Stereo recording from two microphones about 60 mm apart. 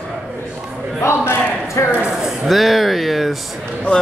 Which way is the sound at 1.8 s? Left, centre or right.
Left.